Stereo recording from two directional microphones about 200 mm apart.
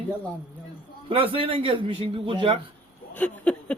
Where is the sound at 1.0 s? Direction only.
25° right (ahead or behind).